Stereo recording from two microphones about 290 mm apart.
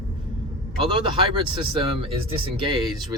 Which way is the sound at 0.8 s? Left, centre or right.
Centre.